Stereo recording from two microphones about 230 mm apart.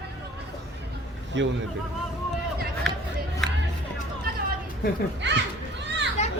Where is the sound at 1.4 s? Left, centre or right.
Right.